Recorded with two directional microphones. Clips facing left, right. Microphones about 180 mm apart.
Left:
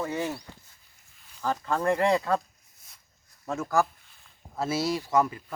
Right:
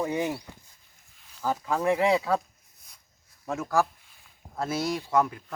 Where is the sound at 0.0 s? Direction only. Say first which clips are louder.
Right 2 dB; 15° right (ahead or behind).